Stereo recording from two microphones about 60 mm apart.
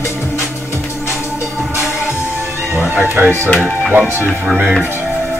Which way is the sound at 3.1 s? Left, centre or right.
Right.